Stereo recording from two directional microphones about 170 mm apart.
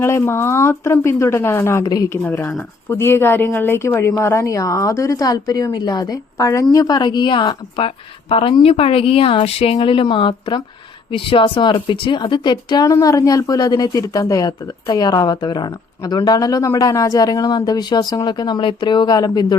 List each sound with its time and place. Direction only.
0.0 s speech: 15° left (ahead or behind)